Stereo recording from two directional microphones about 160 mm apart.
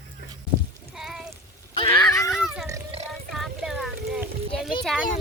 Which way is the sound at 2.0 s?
20° left (ahead or behind).